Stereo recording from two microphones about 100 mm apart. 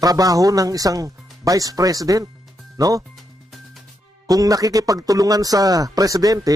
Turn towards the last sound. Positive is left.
turn(degrees=-35)  # may be behind; listen again after turning